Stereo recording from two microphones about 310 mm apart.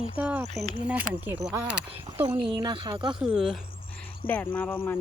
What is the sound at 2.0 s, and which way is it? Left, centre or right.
Speech, centre.